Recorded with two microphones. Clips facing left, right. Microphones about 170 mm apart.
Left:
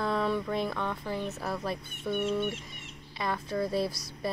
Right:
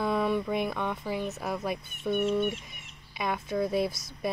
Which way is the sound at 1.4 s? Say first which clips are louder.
Right 2 dB; 15° right (ahead or behind).